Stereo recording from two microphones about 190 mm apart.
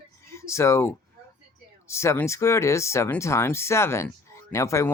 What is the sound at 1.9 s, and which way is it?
Speech, 15° left (ahead or behind).